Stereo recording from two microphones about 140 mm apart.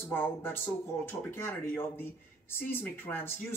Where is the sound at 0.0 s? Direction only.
15° left (ahead or behind).